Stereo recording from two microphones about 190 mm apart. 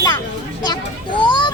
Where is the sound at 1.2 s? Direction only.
25° left (ahead or behind).